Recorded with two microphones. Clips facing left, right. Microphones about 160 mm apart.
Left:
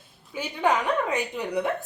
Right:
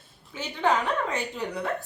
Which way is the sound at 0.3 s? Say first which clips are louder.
Left 1 dB; 10° left (ahead or behind).